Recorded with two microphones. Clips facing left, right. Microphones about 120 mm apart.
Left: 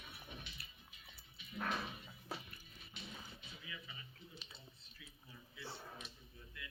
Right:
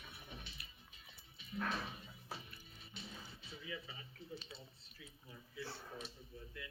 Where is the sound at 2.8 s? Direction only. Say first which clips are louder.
Even; 30° right (ahead or behind).